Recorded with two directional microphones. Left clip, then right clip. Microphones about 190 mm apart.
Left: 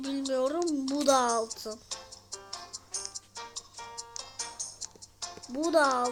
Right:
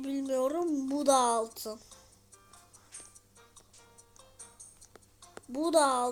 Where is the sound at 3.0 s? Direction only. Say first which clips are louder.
Left 16 dB; 40° left (ahead or behind).